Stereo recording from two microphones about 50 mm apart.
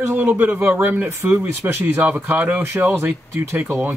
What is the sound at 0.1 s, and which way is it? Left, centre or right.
Speech, right.